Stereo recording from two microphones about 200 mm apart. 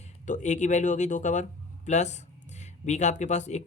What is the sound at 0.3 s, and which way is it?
Speech, 35° left (ahead or behind).